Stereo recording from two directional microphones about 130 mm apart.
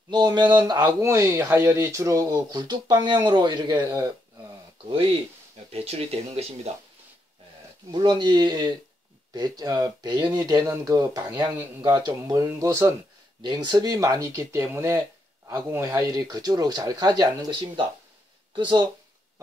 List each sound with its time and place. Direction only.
0.1 s speech: 30° right (ahead or behind)
0.8 s speech: 20° right (ahead or behind); by 5.1 s 40° right (ahead or behind)
5.7 s speech: 50° right (ahead or behind)
7.9 s speech: 35° right (ahead or behind)
13.4 s speech: 35° right (ahead or behind)